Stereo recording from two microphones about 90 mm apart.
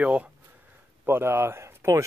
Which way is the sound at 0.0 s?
15° right (ahead or behind).